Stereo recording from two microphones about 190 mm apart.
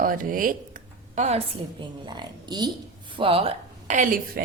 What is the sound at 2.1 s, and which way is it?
A woman's voice, 25° right (ahead or behind).